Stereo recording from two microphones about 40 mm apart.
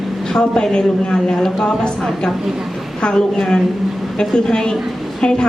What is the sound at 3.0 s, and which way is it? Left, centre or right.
A woman's voice, centre.